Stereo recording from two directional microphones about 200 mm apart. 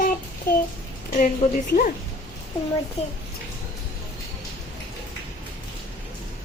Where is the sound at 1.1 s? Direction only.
40° left (ahead or behind).